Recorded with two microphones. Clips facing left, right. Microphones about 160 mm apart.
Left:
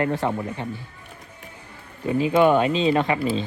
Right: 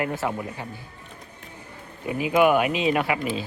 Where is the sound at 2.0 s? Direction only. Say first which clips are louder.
Left 2 dB; 15° right (ahead or behind).